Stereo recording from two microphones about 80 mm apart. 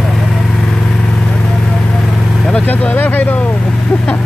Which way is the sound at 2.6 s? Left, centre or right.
Left.